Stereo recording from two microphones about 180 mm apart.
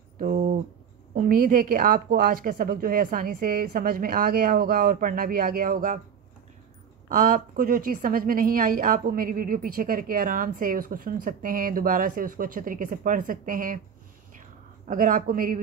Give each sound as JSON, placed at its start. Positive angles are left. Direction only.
{"t": 0.2, "sound": "a sound", "side_deg": -50}
{"t": 1.1, "sound": "a woman's voice", "side_deg": -50}
{"t": 7.1, "sound": "a woman's voice", "side_deg": -50}
{"t": 14.9, "sound": "a woman's voice", "side_deg": -50}